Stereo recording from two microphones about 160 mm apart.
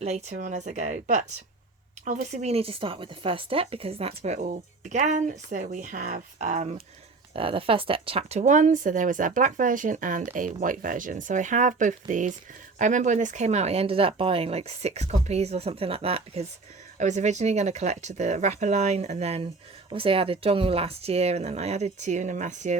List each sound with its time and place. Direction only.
0.0 s a woman's voice: 45° right (ahead or behind)
7.3 s a woman's voice: 35° right (ahead or behind); by 22.8 s 50° right (ahead or behind)